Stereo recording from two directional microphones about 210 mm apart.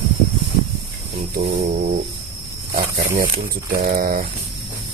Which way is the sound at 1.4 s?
45° right (ahead or behind).